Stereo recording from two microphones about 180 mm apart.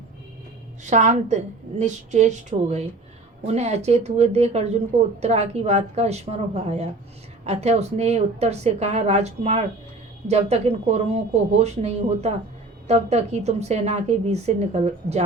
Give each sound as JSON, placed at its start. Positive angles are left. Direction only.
{"t": 0.9, "sound": "a woman's voice", "side_deg": -40}